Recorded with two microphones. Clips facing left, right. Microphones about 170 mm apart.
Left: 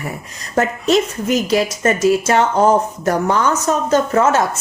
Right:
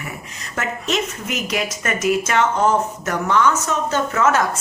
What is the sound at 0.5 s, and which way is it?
A woman's voice, 35° left (ahead or behind).